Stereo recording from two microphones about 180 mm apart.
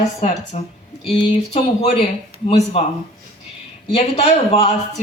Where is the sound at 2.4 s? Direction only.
35° left (ahead or behind).